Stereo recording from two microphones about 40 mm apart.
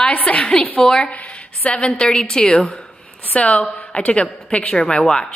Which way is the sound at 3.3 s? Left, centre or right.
Left.